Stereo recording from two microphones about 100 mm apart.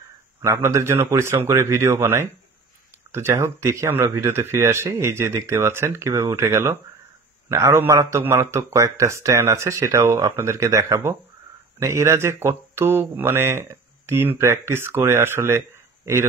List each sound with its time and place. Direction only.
0.4 s speech: 25° right (ahead or behind)